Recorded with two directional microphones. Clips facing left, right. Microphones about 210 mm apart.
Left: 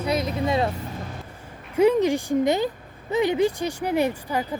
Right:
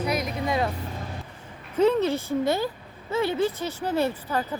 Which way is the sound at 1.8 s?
15° left (ahead or behind).